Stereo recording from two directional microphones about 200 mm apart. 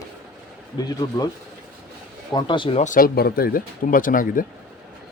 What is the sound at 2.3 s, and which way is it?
Speech, 25° left (ahead or behind).